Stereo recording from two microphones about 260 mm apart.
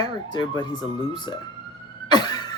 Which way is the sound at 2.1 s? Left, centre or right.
Centre.